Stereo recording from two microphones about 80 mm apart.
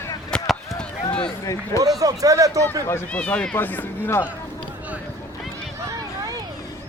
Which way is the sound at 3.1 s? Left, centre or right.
Centre.